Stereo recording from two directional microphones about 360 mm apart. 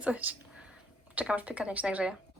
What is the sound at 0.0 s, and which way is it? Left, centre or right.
Speech, centre.